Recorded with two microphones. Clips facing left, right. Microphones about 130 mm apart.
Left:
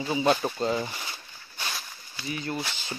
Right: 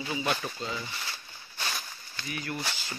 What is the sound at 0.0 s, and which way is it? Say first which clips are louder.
Speech: left 7 dB; 30° left (ahead or behind).